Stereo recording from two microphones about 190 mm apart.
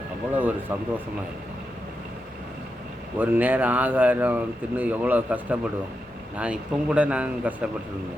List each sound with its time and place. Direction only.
0.3 s speech: 10° right (ahead or behind)
3.2 s speech: 10° right (ahead or behind)